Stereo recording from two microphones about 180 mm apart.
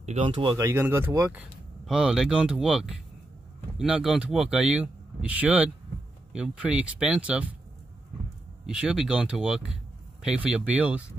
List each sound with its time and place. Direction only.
0.0 s speech: 35° right (ahead or behind)
0.3 s speech: 25° right (ahead or behind)
0.7 s speech: 15° right (ahead or behind)
8.6 s speech: 5° right (ahead or behind)